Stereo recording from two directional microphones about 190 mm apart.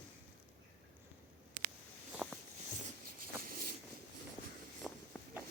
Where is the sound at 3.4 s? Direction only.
50° right (ahead or behind).